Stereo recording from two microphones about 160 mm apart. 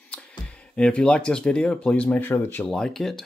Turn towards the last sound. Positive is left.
turn(degrees=0)  # may be behind; listen again after turning